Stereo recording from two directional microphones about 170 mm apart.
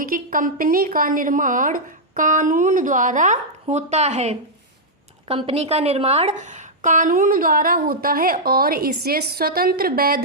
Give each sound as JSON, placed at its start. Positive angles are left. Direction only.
{"t": 0.0, "sound": "a woman's voice", "side_deg": -55}